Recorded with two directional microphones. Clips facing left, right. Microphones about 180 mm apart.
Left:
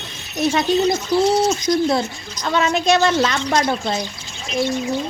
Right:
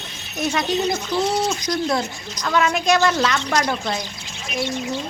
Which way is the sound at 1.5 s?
30° left (ahead or behind).